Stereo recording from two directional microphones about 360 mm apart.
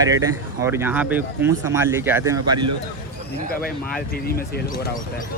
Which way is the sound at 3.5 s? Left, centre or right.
Left.